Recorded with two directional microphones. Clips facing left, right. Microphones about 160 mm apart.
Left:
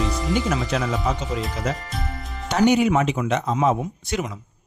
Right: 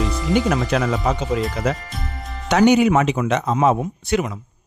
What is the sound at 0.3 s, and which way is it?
Speech, 65° right (ahead or behind).